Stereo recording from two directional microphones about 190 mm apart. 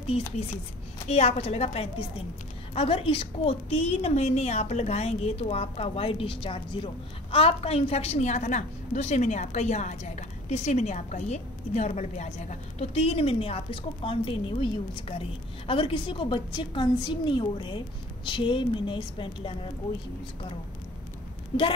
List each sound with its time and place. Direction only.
1.0 s a woman's voice: 35° left (ahead or behind)